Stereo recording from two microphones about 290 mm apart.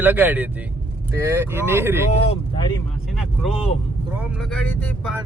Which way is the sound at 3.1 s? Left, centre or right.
Centre.